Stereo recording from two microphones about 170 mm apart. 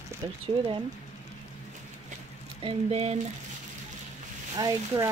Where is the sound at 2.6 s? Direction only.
35° right (ahead or behind).